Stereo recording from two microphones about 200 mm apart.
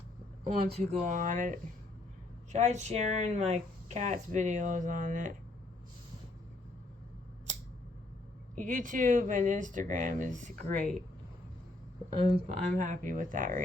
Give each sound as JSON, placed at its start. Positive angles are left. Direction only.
{"t": 0.4, "sound": "speech", "side_deg": -30}
{"t": 8.5, "sound": "speech", "side_deg": -40}
{"t": 12.1, "sound": "speech", "side_deg": -30}